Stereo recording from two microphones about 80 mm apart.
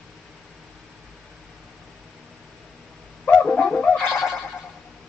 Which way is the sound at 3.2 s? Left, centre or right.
Centre.